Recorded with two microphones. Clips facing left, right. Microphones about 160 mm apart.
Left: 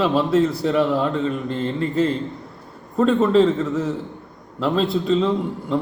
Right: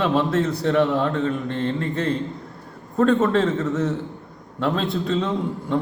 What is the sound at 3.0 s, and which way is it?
Speech, centre (ahead or behind).